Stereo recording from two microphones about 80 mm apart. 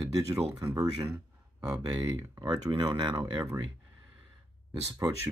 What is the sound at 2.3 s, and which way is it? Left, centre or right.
Speech, right.